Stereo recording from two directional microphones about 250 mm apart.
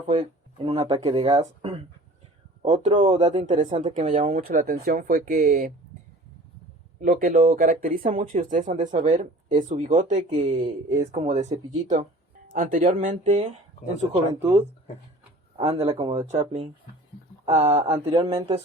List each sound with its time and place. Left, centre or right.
0.1 s speech: centre; by 5.7 s right
7.0 s speech: right
17.9 s speech: centre